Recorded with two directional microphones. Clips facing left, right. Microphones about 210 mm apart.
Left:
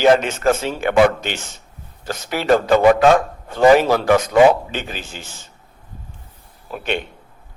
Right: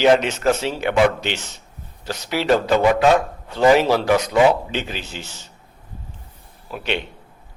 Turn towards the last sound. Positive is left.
turn(degrees=50)  # may be behind; listen again after turning